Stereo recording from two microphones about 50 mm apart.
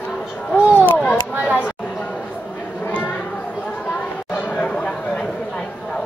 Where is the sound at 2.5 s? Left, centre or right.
Centre.